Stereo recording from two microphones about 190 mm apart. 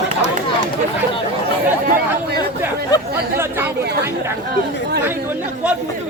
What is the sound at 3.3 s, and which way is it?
Speech, 10° right (ahead or behind).